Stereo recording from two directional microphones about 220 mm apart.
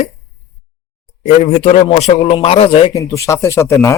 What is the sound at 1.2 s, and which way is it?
A man's voice, 30° left (ahead or behind).